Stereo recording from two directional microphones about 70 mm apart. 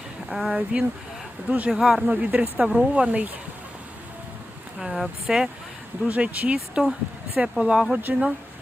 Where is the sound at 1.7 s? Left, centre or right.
Centre.